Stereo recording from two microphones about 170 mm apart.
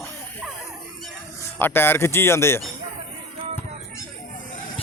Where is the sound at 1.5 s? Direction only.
10° left (ahead or behind).